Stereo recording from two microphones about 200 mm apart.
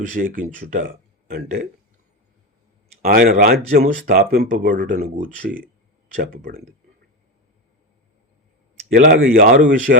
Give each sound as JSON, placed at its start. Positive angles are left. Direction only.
{"t": 0.0, "sound": "speech", "side_deg": -45}
{"t": 3.0, "sound": "speech", "side_deg": -45}
{"t": 6.3, "sound": "speech", "side_deg": -45}
{"t": 8.9, "sound": "speech", "side_deg": -50}